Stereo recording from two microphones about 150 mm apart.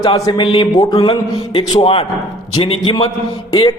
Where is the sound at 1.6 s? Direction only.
35° left (ahead or behind).